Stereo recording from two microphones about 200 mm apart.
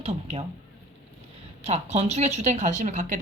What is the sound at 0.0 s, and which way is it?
Speech, 30° right (ahead or behind).